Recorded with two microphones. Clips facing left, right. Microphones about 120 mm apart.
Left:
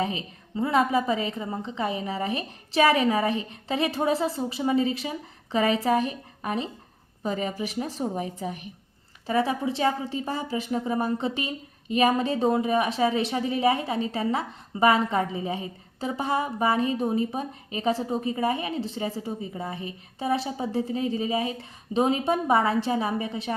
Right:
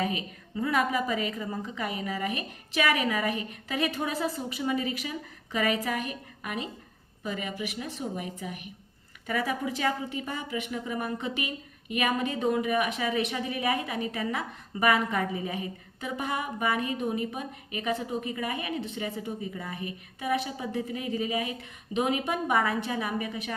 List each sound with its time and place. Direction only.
0.0 s a woman's voice: 25° left (ahead or behind)